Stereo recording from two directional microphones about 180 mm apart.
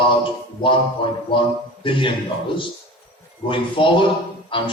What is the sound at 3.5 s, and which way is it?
A man's voice, 30° left (ahead or behind).